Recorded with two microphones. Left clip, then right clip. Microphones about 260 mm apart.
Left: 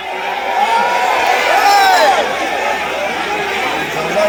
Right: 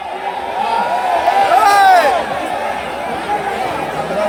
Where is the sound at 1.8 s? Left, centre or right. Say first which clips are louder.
Right 1 dB; centre.